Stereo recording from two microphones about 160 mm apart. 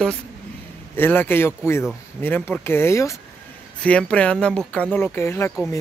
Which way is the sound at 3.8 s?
5° left (ahead or behind).